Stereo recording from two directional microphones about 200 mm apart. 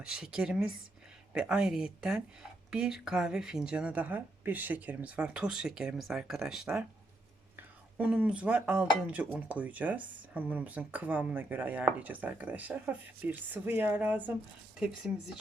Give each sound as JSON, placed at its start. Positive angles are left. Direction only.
{"t": 0.0, "sound": "speech", "side_deg": -5}
{"t": 7.9, "sound": "speech", "side_deg": -5}